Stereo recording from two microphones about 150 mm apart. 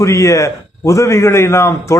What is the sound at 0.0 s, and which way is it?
A man's voice, 20° left (ahead or behind).